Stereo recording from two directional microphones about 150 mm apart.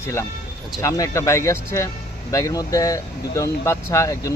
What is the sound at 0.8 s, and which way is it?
Speech, 20° left (ahead or behind).